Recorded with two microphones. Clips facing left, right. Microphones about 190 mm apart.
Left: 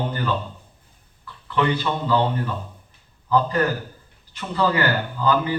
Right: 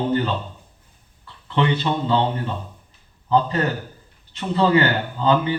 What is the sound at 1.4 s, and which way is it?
Speech, 25° right (ahead or behind).